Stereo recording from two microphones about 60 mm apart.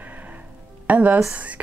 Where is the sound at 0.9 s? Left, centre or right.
Right.